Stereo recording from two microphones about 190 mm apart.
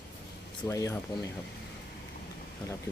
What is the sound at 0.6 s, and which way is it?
Speech, 15° left (ahead or behind).